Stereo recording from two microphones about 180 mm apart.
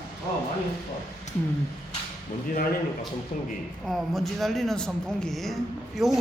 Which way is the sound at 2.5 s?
50° left (ahead or behind).